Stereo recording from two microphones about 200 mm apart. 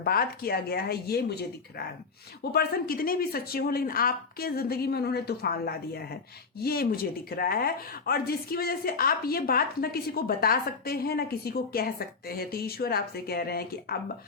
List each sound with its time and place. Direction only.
0.0 s speech: 50° left (ahead or behind)